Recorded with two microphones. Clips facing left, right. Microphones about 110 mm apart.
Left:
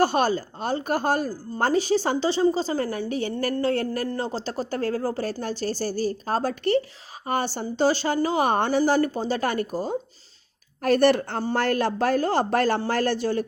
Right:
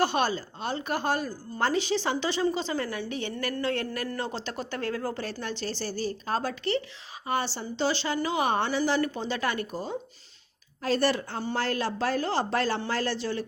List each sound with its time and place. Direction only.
0.0 s a woman's voice: 45° left (ahead or behind)
10.8 s a woman's voice: 60° left (ahead or behind)